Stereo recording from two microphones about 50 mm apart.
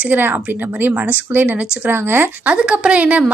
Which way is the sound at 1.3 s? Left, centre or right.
Right.